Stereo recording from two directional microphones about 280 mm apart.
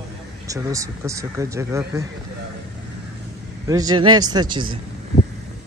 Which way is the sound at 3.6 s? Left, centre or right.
Centre.